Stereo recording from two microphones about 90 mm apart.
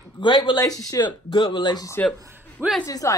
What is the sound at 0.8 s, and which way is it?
Speech, 40° left (ahead or behind).